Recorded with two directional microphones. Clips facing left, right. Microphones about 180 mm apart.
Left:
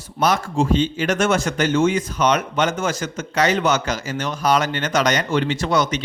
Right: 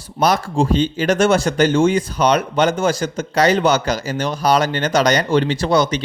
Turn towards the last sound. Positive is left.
turn(degrees=-35)  # may be behind; listen again after turning